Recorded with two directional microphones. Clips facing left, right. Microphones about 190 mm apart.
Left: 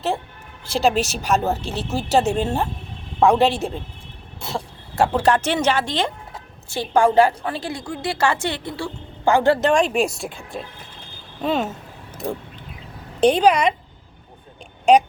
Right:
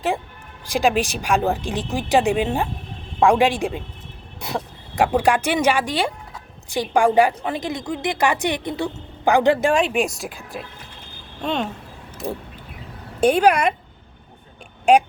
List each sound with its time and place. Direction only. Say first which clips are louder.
0.6 s a woman's voice: even; 15° right (ahead or behind)
4.9 s a woman's voice: even; 15° right (ahead or behind)